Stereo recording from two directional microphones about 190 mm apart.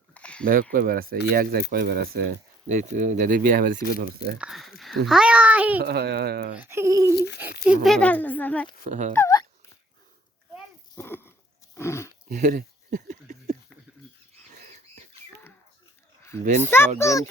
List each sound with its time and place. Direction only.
0.1 s a sound: 5° left (ahead or behind)
0.4 s speech: 50° right (ahead or behind)
2.7 s speech: 40° right (ahead or behind)
4.4 s speech: centre (ahead or behind)
5.8 s speech: 60° right (ahead or behind)
6.6 s speech: 15° right (ahead or behind)
7.9 s speech: 5° left (ahead or behind)
8.8 s speech: 40° right (ahead or behind)
9.1 s speech: 15° left (ahead or behind)
10.9 s a sound: 10° left (ahead or behind)
11.8 s speech: 15° left (ahead or behind)
12.3 s a sound: 45° right (ahead or behind)
16.2 s a child's voice: 10° left (ahead or behind)